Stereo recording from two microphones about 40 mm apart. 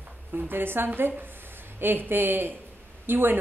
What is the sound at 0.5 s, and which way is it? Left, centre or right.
Speech, right.